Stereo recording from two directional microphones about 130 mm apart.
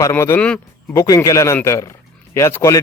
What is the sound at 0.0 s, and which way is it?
A man's voice, 20° left (ahead or behind).